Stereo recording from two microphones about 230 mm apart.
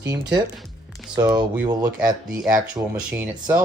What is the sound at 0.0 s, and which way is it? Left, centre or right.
Speech, centre.